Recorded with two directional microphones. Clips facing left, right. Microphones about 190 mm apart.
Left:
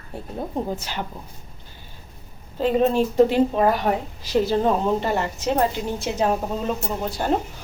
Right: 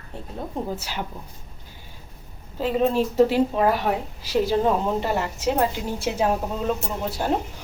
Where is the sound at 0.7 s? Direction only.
5° right (ahead or behind).